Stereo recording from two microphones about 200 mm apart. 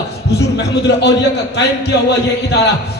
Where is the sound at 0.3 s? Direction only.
60° left (ahead or behind).